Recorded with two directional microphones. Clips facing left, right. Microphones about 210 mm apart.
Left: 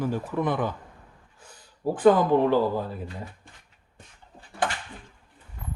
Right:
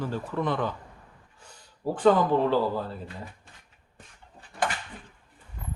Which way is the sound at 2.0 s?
15° left (ahead or behind).